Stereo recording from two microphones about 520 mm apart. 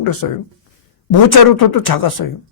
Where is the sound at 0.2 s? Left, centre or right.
Left.